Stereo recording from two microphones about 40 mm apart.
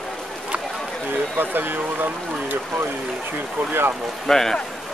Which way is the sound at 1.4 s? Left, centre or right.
Right.